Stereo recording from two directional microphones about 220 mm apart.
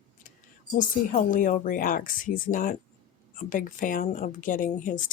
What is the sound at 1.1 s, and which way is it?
Speech, 35° left (ahead or behind).